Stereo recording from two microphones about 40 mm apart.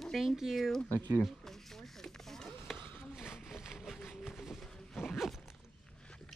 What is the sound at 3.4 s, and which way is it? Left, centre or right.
Vehicle, centre.